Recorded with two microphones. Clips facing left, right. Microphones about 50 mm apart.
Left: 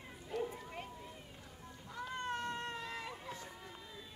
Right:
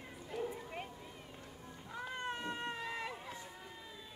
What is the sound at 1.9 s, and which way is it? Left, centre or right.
Cat, centre.